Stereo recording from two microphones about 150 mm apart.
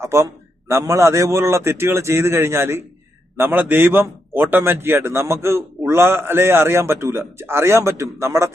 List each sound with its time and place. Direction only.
0.0 s a man's voice: 20° right (ahead or behind)